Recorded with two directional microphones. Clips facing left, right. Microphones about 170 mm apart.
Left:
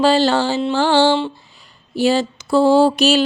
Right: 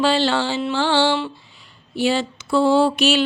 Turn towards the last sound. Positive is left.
turn(degrees=40)  # may be behind; listen again after turning